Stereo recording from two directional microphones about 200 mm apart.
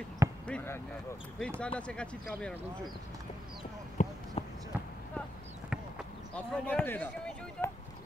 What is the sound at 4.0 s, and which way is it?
Basketball bounce, 40° left (ahead or behind).